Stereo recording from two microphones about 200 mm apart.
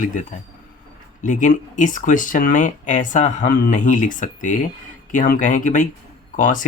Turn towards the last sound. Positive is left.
turn(degrees=40)  # may be behind; listen again after turning